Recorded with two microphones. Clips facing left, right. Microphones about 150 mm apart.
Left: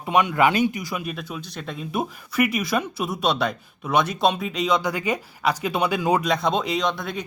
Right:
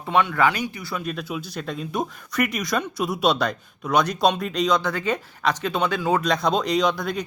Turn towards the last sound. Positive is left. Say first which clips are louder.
# right 3 dB
turn(degrees=0)  # may be behind; listen again after turning